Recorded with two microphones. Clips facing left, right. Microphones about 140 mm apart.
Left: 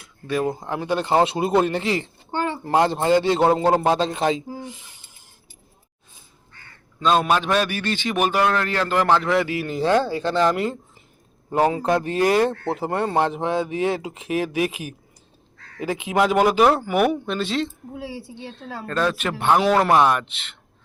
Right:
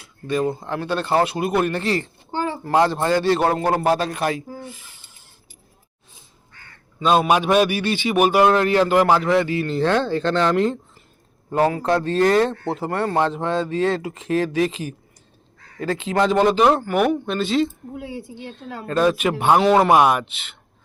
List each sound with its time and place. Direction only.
0.4 s a man's voice: 15° left (ahead or behind)
7.0 s a man's voice: 10° right (ahead or behind)
9.3 s speech: 5° left (ahead or behind)
18.9 s a man's voice: 10° right (ahead or behind)